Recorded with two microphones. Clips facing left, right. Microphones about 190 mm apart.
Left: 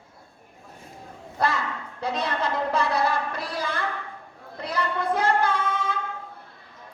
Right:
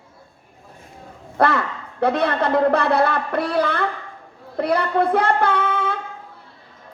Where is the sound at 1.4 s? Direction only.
60° right (ahead or behind).